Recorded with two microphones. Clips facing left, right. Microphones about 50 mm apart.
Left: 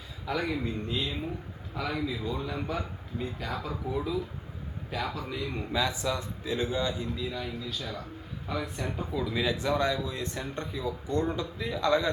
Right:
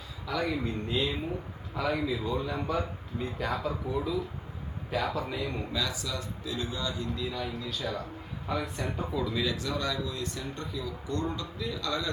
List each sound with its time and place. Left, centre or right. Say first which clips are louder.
0.6 s speech: right 2 dB; centre
5.7 s speech: left 4 dB; left
7.3 s speech: right 1 dB; centre
9.3 s speech: left 3 dB; centre